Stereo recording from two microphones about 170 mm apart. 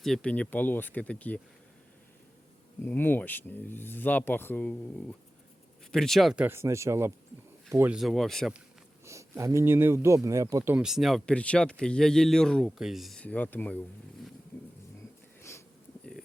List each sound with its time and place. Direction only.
0.0 s speech: 5° left (ahead or behind)
2.8 s speech: 10° left (ahead or behind); by 7.9 s 15° right (ahead or behind)
7.9 s speech: centre (ahead or behind)
9.0 s speech: 15° right (ahead or behind)
10.7 s speech: 5° right (ahead or behind)
15.4 s a sound: 15° left (ahead or behind)